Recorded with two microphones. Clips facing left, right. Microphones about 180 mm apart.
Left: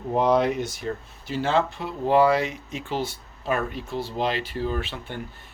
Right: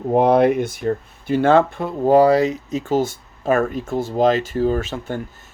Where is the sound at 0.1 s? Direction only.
55° right (ahead or behind).